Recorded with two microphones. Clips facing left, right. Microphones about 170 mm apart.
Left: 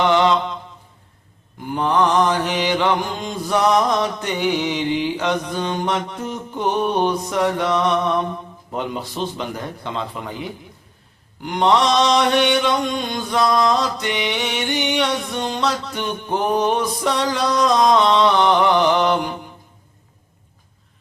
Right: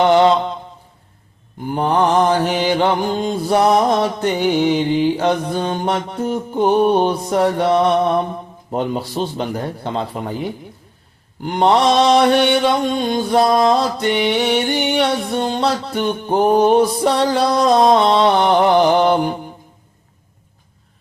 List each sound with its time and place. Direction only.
0.0 s mantra: 40° right (ahead or behind)
1.9 s mantra: 30° right (ahead or behind)